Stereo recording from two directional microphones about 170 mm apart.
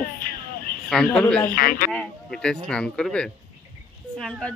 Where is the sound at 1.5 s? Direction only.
55° left (ahead or behind).